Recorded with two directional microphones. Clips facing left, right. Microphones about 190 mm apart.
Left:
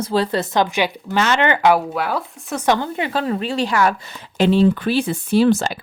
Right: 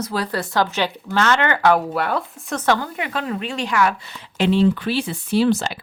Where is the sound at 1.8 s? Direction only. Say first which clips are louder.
Even; centre (ahead or behind).